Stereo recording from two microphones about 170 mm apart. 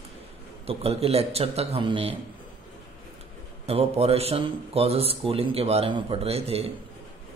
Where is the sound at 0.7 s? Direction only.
35° right (ahead or behind).